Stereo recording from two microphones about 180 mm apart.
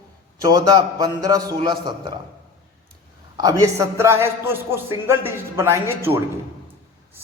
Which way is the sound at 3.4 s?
20° right (ahead or behind).